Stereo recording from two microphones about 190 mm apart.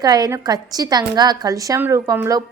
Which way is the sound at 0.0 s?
20° right (ahead or behind).